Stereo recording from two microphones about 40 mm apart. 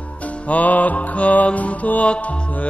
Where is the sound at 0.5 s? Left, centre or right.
Left.